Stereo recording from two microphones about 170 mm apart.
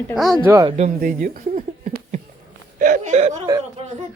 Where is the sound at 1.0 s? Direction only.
55° right (ahead or behind).